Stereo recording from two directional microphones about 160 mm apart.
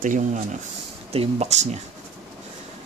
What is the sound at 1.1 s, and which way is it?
Speech, 40° right (ahead or behind).